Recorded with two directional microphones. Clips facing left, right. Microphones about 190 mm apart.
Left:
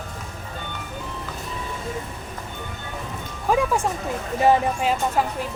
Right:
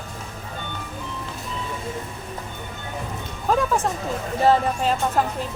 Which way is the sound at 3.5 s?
10° left (ahead or behind).